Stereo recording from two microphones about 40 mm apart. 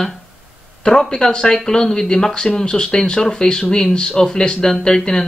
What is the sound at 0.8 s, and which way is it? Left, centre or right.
Speech, centre.